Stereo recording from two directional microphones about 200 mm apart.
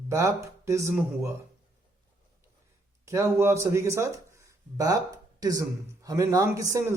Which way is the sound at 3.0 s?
15° right (ahead or behind).